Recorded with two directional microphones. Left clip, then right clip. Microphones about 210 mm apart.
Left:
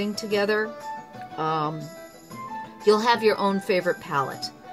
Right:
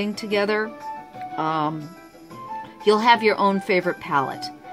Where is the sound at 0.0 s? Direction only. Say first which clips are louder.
Right 2 dB; 30° right (ahead or behind).